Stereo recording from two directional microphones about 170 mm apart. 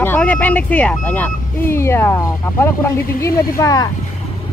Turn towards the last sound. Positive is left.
turn(degrees=20)  # may be behind; listen again after turning